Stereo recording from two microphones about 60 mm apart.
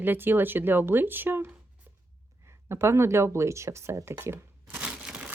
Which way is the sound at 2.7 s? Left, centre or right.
Right.